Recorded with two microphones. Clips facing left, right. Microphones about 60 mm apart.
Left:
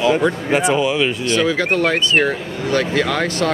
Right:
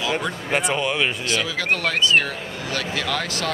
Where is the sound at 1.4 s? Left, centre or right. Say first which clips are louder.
Left 8 dB; left.